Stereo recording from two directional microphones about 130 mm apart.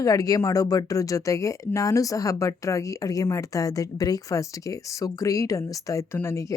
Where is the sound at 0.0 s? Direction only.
25° left (ahead or behind).